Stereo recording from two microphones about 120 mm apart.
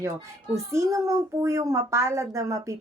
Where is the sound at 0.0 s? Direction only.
25° right (ahead or behind).